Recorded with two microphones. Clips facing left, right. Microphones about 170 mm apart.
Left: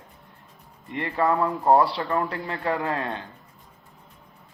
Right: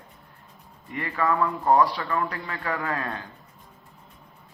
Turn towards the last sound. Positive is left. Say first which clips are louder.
# left 3 dB
turn(degrees=25)  # may be behind; listen again after turning